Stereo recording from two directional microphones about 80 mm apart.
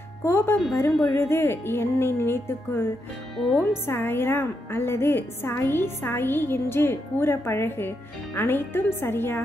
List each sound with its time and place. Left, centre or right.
0.2 s speech: left
3.3 s speech: centre
3.7 s a woman's voice: left